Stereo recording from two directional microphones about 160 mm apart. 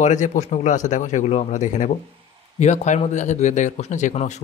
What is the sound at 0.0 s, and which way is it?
Speech, 50° left (ahead or behind).